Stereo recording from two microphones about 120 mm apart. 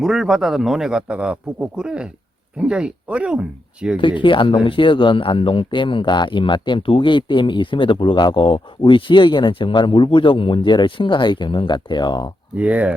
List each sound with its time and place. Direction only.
0.0 s a man's voice: 5° right (ahead or behind)
3.9 s speech: 45° left (ahead or behind)
12.5 s speech: 10° right (ahead or behind)